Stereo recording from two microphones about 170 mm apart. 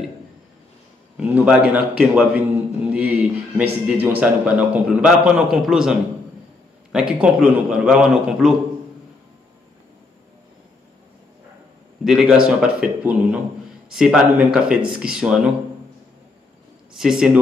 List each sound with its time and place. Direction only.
1.1 s a man's voice: 5° right (ahead or behind)
2.9 s a sound: 10° right (ahead or behind)
3.8 s a man's voice: 10° right (ahead or behind)
12.0 s a man's voice: 5° right (ahead or behind)
16.9 s a man's voice: 5° right (ahead or behind)